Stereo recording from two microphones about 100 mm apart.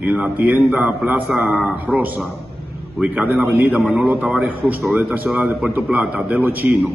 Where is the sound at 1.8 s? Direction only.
15° right (ahead or behind).